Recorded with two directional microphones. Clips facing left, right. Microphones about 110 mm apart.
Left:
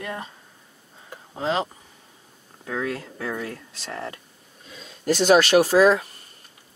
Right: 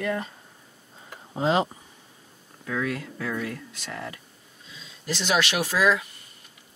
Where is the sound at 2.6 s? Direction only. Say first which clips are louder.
Left 1 dB; 30° left (ahead or behind).